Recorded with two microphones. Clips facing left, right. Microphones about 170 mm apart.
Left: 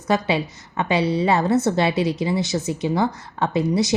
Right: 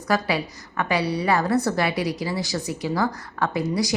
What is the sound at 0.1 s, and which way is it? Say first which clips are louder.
A woman's voice: left 3 dB; 25° left (ahead or behind).